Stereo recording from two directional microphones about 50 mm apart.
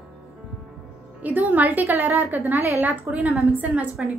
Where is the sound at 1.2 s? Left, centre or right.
Right.